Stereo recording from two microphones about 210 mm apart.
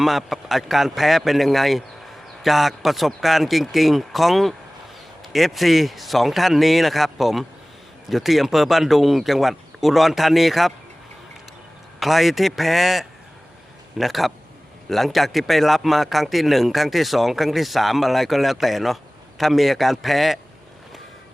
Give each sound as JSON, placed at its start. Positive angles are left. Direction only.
{"t": 0.0, "sound": "speech", "side_deg": 0}
{"t": 11.9, "sound": "speech", "side_deg": 0}